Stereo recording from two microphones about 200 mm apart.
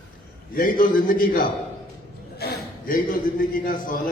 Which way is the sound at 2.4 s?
50° left (ahead or behind).